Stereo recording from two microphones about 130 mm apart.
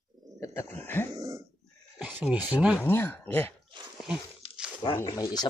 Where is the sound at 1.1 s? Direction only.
25° right (ahead or behind).